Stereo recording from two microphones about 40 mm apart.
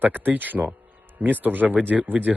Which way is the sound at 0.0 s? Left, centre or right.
Right.